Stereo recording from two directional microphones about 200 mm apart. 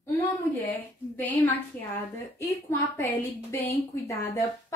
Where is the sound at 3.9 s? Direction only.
15° left (ahead or behind).